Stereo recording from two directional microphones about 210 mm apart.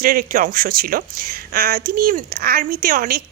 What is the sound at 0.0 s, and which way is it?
A woman's voice, 45° right (ahead or behind).